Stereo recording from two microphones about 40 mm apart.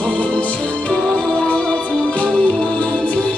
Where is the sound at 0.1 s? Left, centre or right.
Left.